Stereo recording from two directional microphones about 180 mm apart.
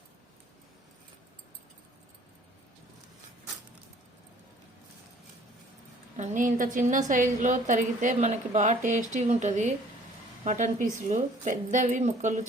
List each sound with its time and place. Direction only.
6.1 s a woman's voice: 45° right (ahead or behind)